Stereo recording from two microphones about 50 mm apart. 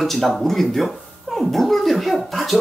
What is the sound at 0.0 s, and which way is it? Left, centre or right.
Speech, centre.